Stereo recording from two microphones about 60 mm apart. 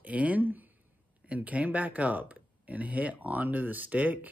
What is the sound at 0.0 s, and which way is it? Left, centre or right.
Speech, right.